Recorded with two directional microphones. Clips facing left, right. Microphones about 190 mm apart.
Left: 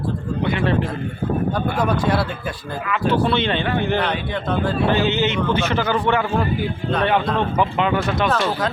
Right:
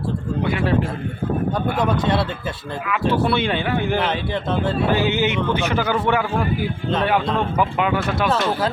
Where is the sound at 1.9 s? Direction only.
25° right (ahead or behind).